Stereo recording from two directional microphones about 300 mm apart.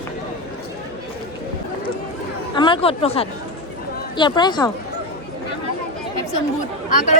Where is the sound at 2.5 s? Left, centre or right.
Centre.